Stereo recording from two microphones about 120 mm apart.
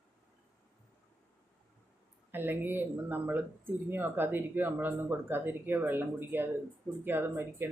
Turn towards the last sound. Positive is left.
turn(degrees=-20)  # may be behind; listen again after turning